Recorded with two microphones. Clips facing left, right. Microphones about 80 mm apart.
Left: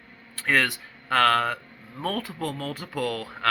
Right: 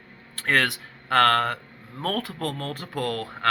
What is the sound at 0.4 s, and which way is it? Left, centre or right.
Speech, right.